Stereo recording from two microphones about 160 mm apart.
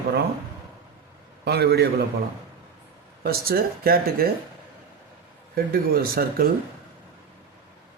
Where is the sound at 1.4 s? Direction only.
90° right.